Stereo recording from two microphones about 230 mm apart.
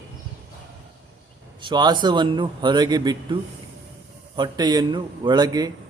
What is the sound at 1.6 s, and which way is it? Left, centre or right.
A man's voice, centre.